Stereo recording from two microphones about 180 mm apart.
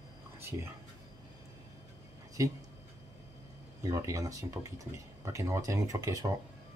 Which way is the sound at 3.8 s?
20° right (ahead or behind).